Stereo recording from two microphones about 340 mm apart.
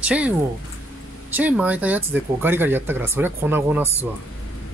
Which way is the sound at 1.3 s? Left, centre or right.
Centre.